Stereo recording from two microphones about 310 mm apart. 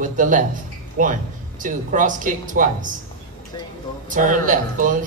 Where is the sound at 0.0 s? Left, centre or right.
Right.